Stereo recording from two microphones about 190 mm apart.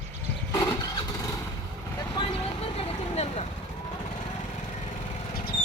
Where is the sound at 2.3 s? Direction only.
35° left (ahead or behind).